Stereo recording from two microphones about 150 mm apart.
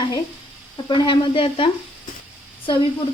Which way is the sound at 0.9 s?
35° left (ahead or behind).